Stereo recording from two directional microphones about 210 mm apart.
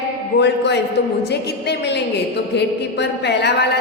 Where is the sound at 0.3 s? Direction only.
55° left (ahead or behind).